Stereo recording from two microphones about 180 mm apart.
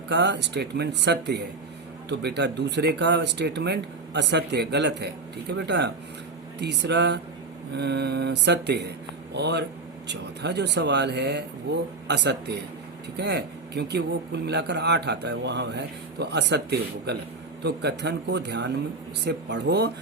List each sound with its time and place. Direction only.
0.1 s speech: 70° right (ahead or behind)